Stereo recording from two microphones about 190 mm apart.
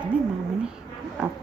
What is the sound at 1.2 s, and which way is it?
Speech, 5° right (ahead or behind).